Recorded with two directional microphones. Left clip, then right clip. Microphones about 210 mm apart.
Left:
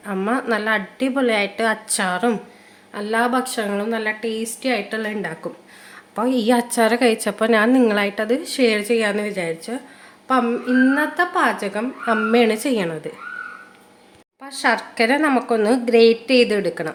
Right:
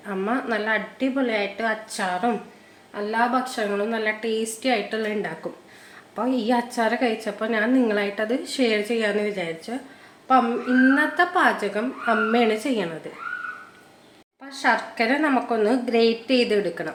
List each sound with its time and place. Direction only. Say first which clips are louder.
0.0 s a woman's voice: left 3 dB; 30° left (ahead or behind)
6.1 s a woman's voice: left 4 dB; 35° left (ahead or behind)
14.4 s a woman's voice: left 2 dB; 35° left (ahead or behind)